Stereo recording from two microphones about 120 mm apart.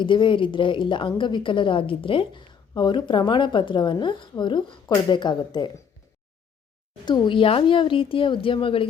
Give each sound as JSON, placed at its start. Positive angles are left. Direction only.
{"t": 0.0, "sound": "a woman's voice", "side_deg": 45}
{"t": 7.0, "sound": "a woman's voice", "side_deg": 40}